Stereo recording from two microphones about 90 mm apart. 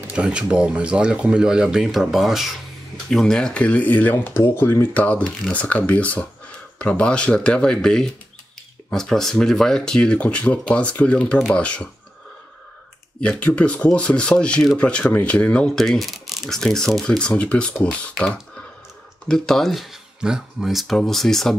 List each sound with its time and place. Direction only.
0.1 s speech: 10° right (ahead or behind); by 11.9 s 10° left (ahead or behind)
13.2 s speech: 15° left (ahead or behind)